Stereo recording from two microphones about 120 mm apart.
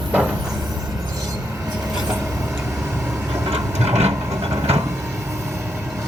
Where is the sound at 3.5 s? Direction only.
60° right (ahead or behind).